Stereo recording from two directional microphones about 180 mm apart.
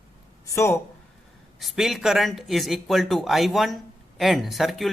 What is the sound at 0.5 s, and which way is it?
Speech, 15° left (ahead or behind).